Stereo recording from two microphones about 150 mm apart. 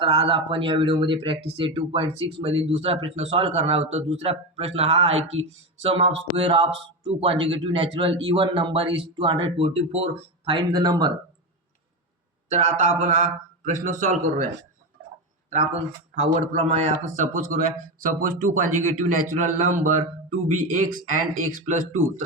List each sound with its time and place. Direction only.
0.0 s speech: 35° right (ahead or behind)
12.5 s a man's voice: 50° right (ahead or behind)
16.1 s a man's voice: 50° right (ahead or behind)